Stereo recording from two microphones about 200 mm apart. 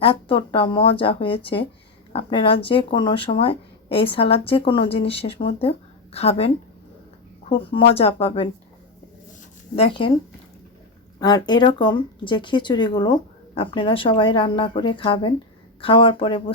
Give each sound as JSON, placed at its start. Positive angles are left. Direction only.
{"t": 0.0, "sound": "speech", "side_deg": 25}
{"t": 7.5, "sound": "speech", "side_deg": 30}
{"t": 9.7, "sound": "speech", "side_deg": 30}
{"t": 11.2, "sound": "speech", "side_deg": 20}